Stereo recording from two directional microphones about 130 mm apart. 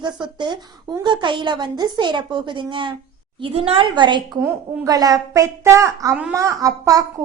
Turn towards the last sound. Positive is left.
turn(degrees=-25)  # may be behind; listen again after turning